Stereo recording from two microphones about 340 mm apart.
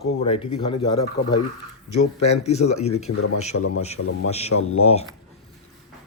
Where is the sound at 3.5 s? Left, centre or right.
Left.